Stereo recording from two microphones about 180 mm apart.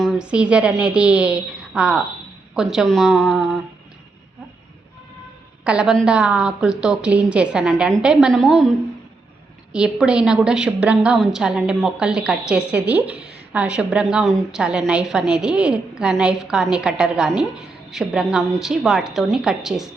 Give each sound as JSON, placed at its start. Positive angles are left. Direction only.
{"t": 0.0, "sound": "a woman's voice", "side_deg": -5}
{"t": 5.6, "sound": "a woman's voice", "side_deg": -5}
{"t": 9.7, "sound": "a woman's voice", "side_deg": -5}